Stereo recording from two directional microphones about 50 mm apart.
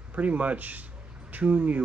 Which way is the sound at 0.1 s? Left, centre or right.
Right.